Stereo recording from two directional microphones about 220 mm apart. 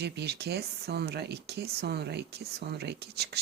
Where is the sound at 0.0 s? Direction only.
50° right (ahead or behind).